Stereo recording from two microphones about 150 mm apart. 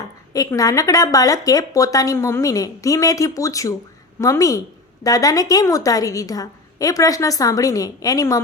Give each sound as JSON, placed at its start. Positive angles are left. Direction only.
{"t": 0.3, "sound": "speech", "side_deg": 25}